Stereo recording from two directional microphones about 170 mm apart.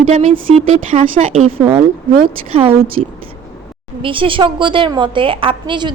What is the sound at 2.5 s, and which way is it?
A woman's voice, 35° right (ahead or behind).